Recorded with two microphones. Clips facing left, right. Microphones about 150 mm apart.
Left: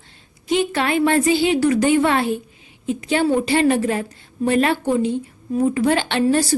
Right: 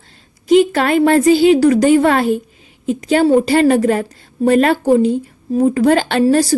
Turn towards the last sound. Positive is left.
turn(degrees=-40)  # may be behind; listen again after turning